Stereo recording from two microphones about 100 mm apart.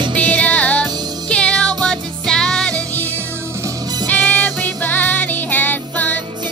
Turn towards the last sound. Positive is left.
turn(degrees=15)  # may be behind; listen again after turning